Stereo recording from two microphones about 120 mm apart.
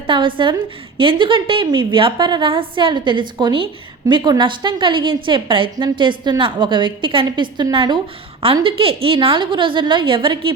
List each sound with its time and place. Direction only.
0.1 s a woman's voice: 45° right (ahead or behind)